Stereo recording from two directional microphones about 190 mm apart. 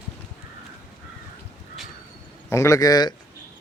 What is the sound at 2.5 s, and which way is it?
Speech, 15° left (ahead or behind).